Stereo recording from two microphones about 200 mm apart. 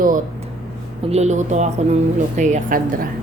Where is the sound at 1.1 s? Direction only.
35° right (ahead or behind).